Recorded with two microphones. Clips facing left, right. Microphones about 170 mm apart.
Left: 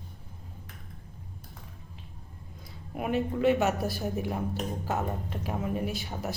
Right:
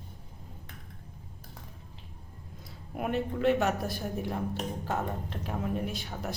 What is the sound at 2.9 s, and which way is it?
Speech, centre (ahead or behind).